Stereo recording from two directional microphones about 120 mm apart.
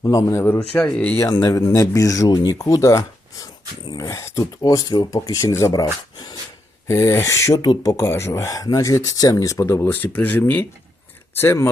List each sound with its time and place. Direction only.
0.0 s speech: 30° left (ahead or behind)
0.7 s speech: 10° left (ahead or behind)
1.2 s speech: 30° left (ahead or behind)
5.8 s speech: 35° left (ahead or behind)
6.8 s speech: 25° left (ahead or behind)